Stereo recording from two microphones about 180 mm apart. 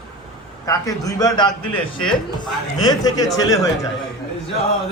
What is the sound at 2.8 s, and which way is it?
Speech, 20° left (ahead or behind).